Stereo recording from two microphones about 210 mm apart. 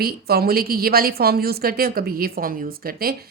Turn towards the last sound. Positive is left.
turn(degrees=-45)  # may be behind; listen again after turning